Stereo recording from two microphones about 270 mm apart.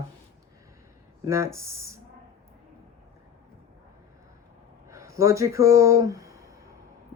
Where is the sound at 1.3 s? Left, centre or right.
Centre.